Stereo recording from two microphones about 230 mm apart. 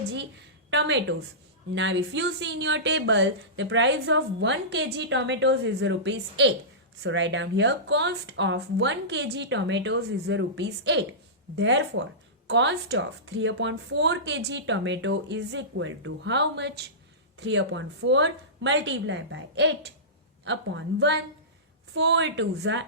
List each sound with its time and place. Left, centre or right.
0.7 s speech: right